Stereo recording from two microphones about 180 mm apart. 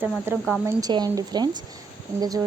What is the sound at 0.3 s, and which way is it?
Speech, 15° right (ahead or behind).